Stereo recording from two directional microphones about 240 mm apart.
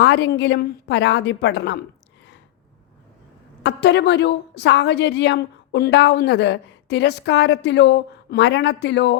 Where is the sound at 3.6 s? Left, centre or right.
Left.